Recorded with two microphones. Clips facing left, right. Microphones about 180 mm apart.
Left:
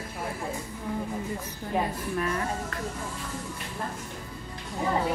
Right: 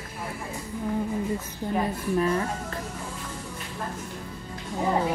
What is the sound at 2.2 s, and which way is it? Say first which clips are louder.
Speech: right 5 dB; 30° right (ahead or behind).